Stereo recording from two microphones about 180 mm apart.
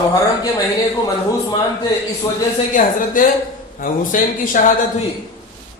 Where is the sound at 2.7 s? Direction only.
50° left (ahead or behind).